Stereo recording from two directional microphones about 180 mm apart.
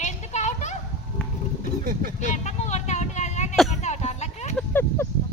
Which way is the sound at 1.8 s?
55° right (ahead or behind).